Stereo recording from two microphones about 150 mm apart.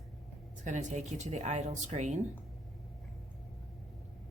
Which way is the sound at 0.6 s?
50° right (ahead or behind).